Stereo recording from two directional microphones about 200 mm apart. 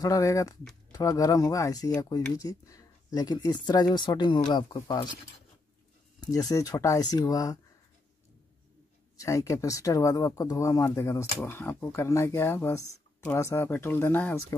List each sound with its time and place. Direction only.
0.0 s speech: 15° left (ahead or behind)
6.2 s speech: 20° left (ahead or behind)
9.1 s speech: 15° left (ahead or behind)